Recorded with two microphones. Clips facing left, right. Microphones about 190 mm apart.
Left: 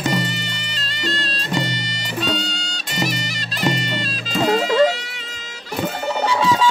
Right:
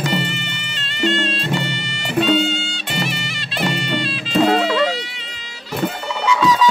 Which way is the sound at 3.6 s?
40° left (ahead or behind).